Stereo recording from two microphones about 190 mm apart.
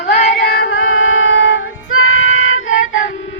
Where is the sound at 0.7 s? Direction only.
90° left.